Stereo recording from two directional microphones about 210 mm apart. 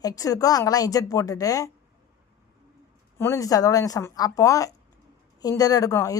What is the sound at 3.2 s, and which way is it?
Speech, 15° left (ahead or behind).